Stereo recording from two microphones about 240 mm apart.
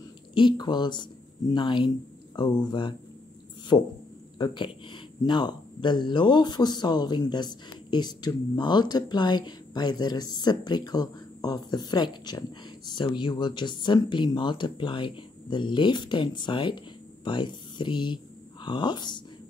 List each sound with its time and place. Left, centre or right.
0.3 s speech: centre
4.4 s speech: centre